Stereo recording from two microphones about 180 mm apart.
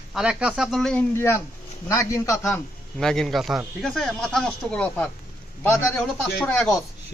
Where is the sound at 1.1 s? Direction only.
15° left (ahead or behind).